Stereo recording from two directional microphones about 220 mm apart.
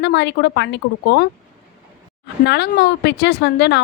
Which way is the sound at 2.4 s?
50° left (ahead or behind).